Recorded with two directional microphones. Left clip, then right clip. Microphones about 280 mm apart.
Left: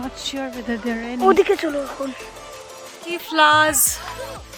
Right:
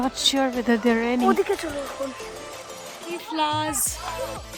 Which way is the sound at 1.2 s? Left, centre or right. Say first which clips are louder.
Left 10 dB; left.